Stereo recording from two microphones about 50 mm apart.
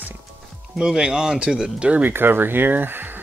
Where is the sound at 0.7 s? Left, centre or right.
Centre.